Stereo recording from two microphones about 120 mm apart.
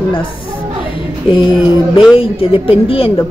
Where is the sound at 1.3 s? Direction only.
45° left (ahead or behind).